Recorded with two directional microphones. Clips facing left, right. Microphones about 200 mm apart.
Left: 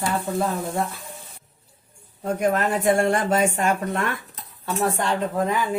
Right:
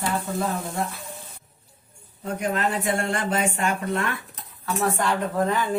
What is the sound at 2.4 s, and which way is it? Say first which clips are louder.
Speech: left 3 dB; 45° left (ahead or behind).